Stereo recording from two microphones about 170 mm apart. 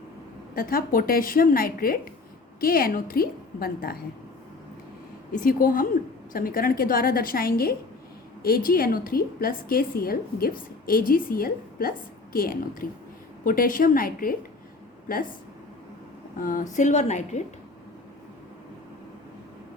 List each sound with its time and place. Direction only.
0.5 s a woman's voice: 55° left (ahead or behind)
5.3 s a woman's voice: 55° left (ahead or behind)
16.4 s a woman's voice: 50° left (ahead or behind)